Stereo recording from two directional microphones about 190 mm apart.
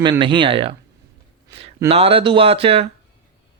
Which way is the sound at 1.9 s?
30° right (ahead or behind).